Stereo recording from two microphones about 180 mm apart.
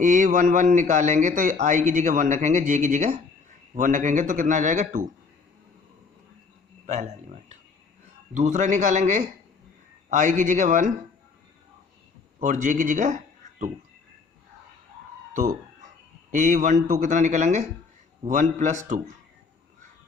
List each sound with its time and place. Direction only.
0.0 s a man's voice: 45° right (ahead or behind)
6.8 s a sound: 40° right (ahead or behind)
8.3 s a man's voice: 45° right (ahead or behind)
12.4 s a man's voice: 45° right (ahead or behind)
16.3 s a man's voice: 45° right (ahead or behind)